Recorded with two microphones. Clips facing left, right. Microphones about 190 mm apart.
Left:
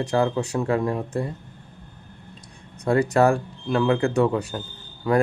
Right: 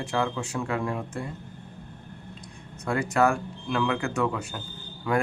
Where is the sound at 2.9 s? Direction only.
35° left (ahead or behind).